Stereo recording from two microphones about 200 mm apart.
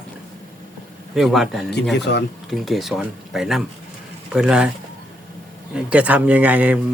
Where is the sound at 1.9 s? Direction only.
55° left (ahead or behind).